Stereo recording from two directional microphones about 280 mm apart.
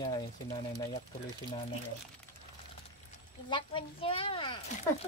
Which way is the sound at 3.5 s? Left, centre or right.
Centre.